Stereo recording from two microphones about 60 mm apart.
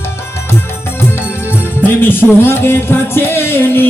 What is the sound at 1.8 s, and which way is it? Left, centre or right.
Speech, left.